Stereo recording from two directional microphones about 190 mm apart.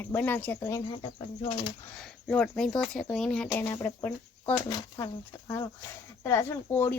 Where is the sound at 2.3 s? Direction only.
5° left (ahead or behind); by 5.1 s 20° left (ahead or behind).